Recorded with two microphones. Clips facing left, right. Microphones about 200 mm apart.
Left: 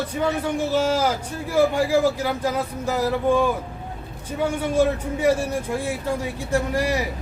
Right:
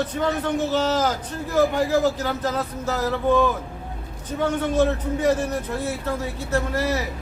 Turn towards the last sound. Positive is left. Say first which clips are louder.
# left 1 dB
turn(degrees=15)  # may be behind; listen again after turning